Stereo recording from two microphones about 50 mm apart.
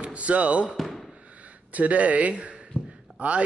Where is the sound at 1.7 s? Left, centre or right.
Right.